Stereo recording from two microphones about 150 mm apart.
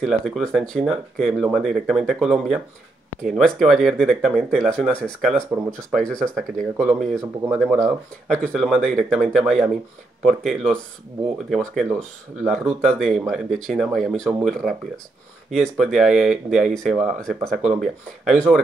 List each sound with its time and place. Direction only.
0.0 s speech: centre (ahead or behind)